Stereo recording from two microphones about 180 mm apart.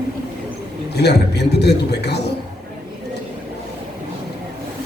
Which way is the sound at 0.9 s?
65° left (ahead or behind).